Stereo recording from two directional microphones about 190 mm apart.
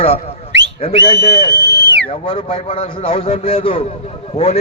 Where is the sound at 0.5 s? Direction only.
70° right (ahead or behind).